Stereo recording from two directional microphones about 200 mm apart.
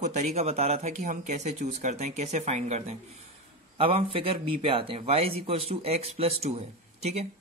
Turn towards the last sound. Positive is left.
turn(degrees=-35)  # may be behind; listen again after turning